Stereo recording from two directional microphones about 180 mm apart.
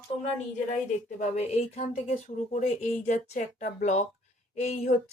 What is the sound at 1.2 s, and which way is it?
A woman's voice, 40° left (ahead or behind).